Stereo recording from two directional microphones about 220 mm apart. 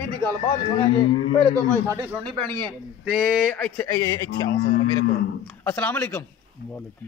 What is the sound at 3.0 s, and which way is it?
Speech, centre (ahead or behind).